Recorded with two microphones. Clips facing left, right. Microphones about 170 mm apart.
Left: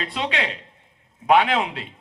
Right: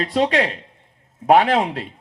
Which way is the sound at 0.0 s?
40° right (ahead or behind).